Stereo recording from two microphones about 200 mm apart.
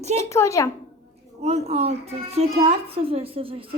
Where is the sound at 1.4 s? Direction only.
30° right (ahead or behind).